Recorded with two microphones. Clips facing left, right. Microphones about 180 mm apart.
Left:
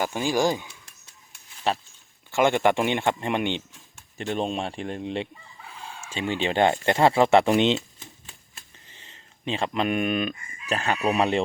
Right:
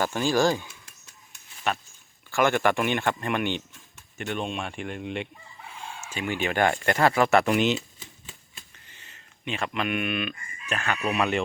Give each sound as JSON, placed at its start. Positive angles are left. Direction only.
{"t": 0.0, "sound": "speech", "side_deg": 15}
{"t": 1.7, "sound": "speech", "side_deg": 30}
{"t": 2.3, "sound": "speech", "side_deg": 20}
{"t": 4.2, "sound": "speech", "side_deg": 35}